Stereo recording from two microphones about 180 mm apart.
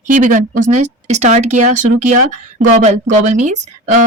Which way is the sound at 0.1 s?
45° right (ahead or behind).